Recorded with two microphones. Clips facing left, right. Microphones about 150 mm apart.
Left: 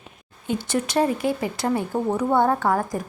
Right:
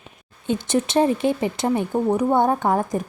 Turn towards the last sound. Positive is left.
turn(degrees=-20)  # may be behind; listen again after turning